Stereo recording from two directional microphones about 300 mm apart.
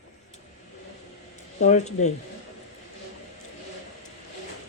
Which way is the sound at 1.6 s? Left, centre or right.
Left.